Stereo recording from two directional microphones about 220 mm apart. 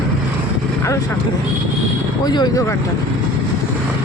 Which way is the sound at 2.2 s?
20° left (ahead or behind).